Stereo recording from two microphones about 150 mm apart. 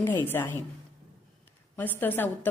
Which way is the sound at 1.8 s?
15° left (ahead or behind).